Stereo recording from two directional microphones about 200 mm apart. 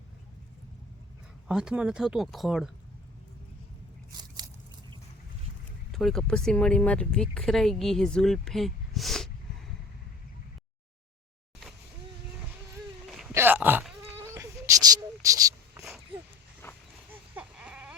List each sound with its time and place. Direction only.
1.5 s speech: 5° right (ahead or behind)
5.9 s speech: centre (ahead or behind)
13.1 s wail: centre (ahead or behind)
13.3 s a sound: 10° right (ahead or behind)
16.6 s dog: 10° left (ahead or behind)
17.1 s baby cry: 5° right (ahead or behind)